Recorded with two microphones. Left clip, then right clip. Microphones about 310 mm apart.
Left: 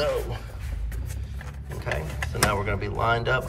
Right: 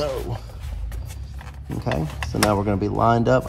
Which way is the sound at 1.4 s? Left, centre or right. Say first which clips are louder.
Right 5 dB; centre.